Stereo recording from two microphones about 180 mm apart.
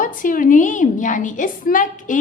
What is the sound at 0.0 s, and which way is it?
A woman's voice, 50° left (ahead or behind).